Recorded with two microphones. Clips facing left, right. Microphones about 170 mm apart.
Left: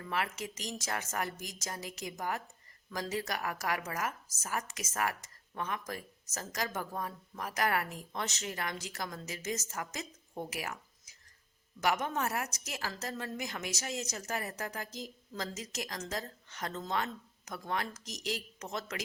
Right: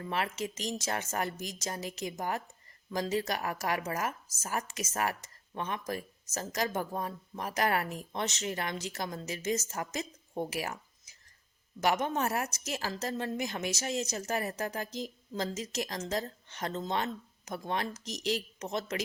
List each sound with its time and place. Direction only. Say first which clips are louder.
0.0 s speech: right 3 dB; 25° right (ahead or behind)